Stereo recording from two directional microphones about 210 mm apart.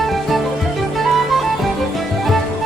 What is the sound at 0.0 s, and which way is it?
Music, centre (ahead or behind).